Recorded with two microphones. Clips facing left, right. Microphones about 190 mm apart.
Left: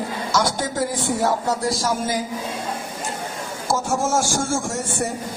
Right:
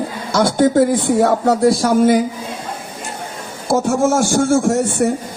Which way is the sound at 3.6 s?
60° right (ahead or behind).